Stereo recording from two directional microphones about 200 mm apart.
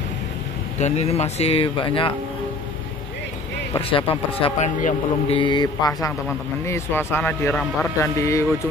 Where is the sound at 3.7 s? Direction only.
25° left (ahead or behind).